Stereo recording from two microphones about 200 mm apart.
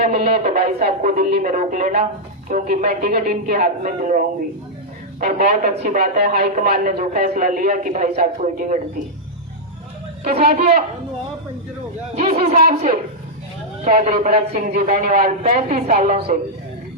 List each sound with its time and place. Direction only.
0.3 s a man's voice: 40° right (ahead or behind)
5.2 s a man's voice: 40° right (ahead or behind)
10.2 s speech: 35° right (ahead or behind)
12.1 s a man's voice: 35° right (ahead or behind)